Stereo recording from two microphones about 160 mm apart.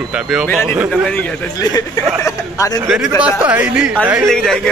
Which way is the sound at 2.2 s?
20° left (ahead or behind).